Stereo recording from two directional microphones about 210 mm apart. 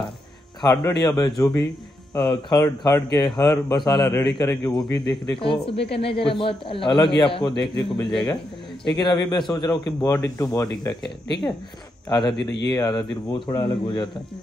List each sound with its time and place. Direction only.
0.6 s speech: 20° left (ahead or behind)
12.1 s speech: 20° left (ahead or behind)